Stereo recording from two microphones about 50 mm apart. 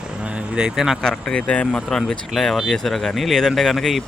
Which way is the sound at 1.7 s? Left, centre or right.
Centre.